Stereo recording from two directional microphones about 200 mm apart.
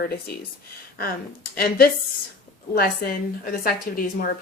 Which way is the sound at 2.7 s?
45° left (ahead or behind).